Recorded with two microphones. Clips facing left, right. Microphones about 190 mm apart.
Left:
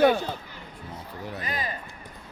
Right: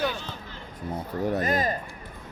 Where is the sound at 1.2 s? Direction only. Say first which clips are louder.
Right 8 dB; 45° right (ahead or behind).